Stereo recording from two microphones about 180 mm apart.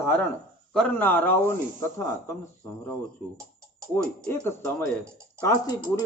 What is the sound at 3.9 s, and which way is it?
Mantra, 10° left (ahead or behind).